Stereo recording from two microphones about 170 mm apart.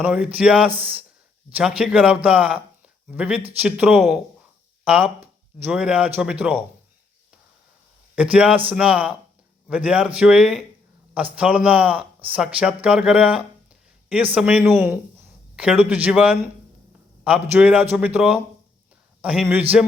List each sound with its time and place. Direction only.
0.0 s speech: 5° right (ahead or behind)
8.1 s speech: 5° right (ahead or behind)